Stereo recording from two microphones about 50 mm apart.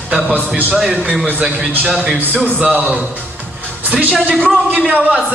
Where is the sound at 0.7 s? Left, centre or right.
Centre.